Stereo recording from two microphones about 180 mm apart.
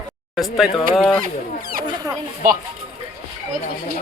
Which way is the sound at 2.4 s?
50° right (ahead or behind).